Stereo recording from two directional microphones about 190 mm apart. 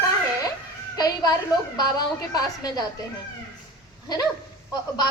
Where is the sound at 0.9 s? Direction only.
20° left (ahead or behind).